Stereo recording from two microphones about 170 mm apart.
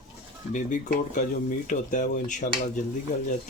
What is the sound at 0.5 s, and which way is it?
Speech, 50° left (ahead or behind).